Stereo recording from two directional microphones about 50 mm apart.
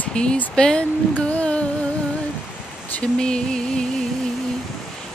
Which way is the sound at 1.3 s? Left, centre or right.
Left.